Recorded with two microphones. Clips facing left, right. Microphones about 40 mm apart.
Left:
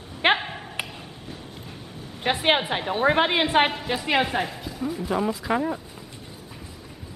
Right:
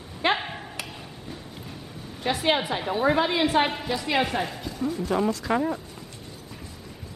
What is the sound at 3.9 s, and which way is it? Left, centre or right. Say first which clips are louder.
Speech: left 2 dB; left.